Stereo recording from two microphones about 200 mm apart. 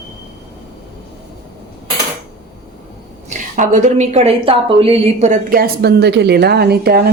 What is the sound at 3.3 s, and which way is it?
A woman's voice, 40° right (ahead or behind).